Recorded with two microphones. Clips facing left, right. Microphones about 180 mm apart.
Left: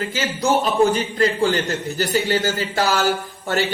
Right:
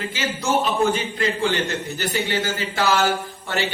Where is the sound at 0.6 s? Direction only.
40° left (ahead or behind).